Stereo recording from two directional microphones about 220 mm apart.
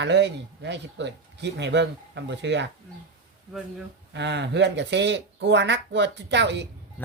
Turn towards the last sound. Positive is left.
turn(degrees=-50)  # may be behind; listen again after turning